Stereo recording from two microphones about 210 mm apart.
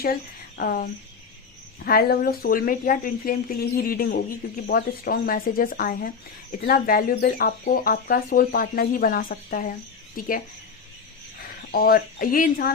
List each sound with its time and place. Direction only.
0.0 s speech: 45° left (ahead or behind)
11.7 s speech: 45° left (ahead or behind)